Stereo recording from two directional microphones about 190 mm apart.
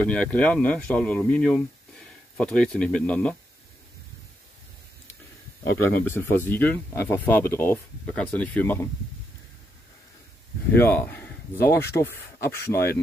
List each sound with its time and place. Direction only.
0.0 s speech: 5° left (ahead or behind)
5.6 s speech: 10° left (ahead or behind)
10.7 s speech: 10° left (ahead or behind)